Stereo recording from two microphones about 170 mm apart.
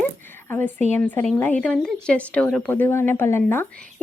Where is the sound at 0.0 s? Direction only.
10° left (ahead or behind).